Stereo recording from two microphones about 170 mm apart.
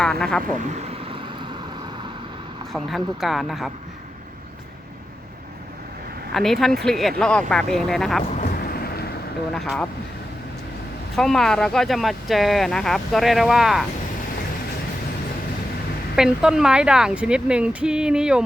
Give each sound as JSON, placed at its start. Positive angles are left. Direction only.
{"t": 0.0, "sound": "speech", "side_deg": 5}
{"t": 2.7, "sound": "speech", "side_deg": 0}
{"t": 6.3, "sound": "speech", "side_deg": 0}
{"t": 8.4, "sound": "a sound", "side_deg": 65}
{"t": 9.5, "sound": "speech", "side_deg": 0}
{"t": 11.2, "sound": "speech", "side_deg": 5}
{"t": 16.1, "sound": "speech", "side_deg": -5}